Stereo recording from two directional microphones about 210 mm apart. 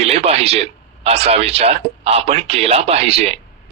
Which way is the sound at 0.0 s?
30° right (ahead or behind).